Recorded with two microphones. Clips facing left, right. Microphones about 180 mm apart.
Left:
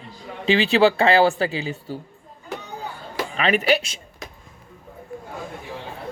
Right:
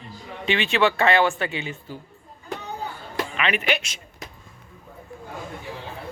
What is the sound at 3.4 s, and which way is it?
Speech, 40° left (ahead or behind).